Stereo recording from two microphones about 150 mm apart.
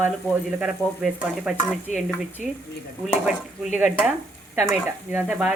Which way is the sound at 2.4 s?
55° left (ahead or behind).